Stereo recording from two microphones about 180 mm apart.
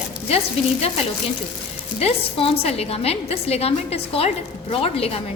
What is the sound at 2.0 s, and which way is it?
A woman's voice, 35° left (ahead or behind).